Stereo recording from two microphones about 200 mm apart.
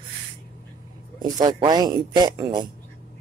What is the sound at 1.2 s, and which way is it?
Speech, 20° right (ahead or behind).